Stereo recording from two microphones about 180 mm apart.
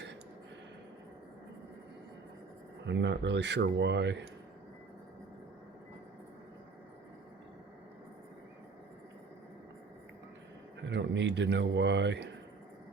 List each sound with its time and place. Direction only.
2.8 s speech: 80° right
10.8 s speech: 80° right